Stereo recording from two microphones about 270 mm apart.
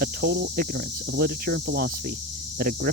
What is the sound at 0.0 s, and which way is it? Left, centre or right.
Cricket, right.